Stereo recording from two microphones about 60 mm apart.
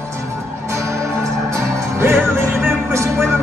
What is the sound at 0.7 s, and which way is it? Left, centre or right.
Music, right.